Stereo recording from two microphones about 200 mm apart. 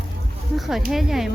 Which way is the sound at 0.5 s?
Centre (ahead or behind).